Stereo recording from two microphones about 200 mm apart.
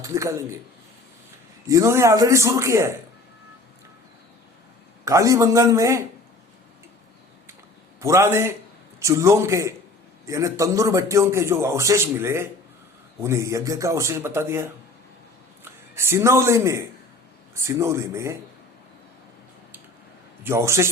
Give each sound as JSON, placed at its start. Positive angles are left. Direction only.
{"t": 0.0, "sound": "a man's voice", "side_deg": -15}
{"t": 1.6, "sound": "a man's voice", "side_deg": -15}
{"t": 5.0, "sound": "a man's voice", "side_deg": -15}
{"t": 8.0, "sound": "a man's voice", "side_deg": -15}
{"t": 16.0, "sound": "a man's voice", "side_deg": -15}
{"t": 20.4, "sound": "a man's voice", "side_deg": -15}